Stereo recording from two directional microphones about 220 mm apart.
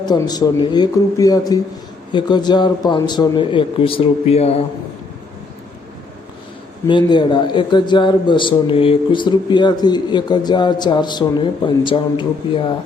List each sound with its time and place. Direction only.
0.0 s a man's voice: 20° left (ahead or behind)
6.8 s speech: 20° left (ahead or behind)